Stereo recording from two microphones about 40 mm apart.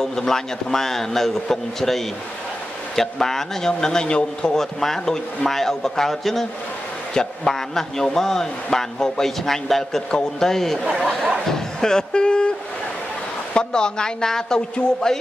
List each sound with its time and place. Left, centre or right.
0.0 s a man's voice: centre
10.8 s speech: right
11.4 s speech: centre